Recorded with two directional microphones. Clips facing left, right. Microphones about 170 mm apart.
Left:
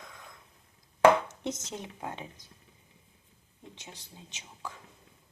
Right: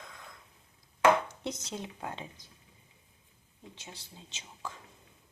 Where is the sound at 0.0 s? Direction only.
15° left (ahead or behind).